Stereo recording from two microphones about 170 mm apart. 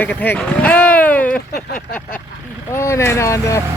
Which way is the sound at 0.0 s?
10° left (ahead or behind).